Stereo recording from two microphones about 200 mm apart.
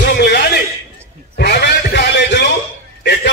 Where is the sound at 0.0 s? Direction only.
55° left (ahead or behind).